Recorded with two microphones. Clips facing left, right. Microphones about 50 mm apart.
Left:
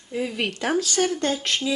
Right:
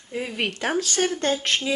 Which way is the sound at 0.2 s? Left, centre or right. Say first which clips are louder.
Left 1 dB; right.